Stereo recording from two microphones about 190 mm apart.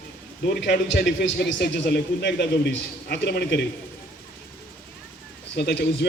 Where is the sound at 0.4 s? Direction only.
55° left (ahead or behind).